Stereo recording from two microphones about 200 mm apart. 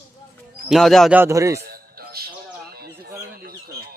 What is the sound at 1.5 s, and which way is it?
Music, 50° right (ahead or behind).